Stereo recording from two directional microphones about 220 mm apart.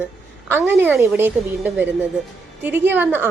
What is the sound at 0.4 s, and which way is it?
A woman's voice, 10° right (ahead or behind).